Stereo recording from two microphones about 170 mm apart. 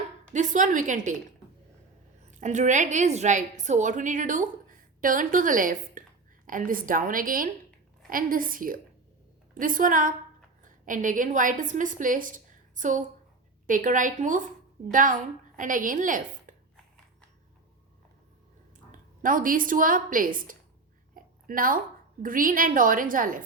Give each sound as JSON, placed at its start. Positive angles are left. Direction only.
{"t": 0.3, "sound": "a woman's voice", "side_deg": -50}
{"t": 2.4, "sound": "a woman's voice", "side_deg": -45}
{"t": 18.9, "sound": "a woman's voice", "side_deg": -55}